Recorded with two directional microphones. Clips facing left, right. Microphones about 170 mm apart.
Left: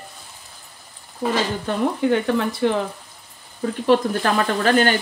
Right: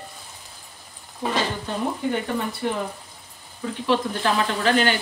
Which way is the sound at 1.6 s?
85° left.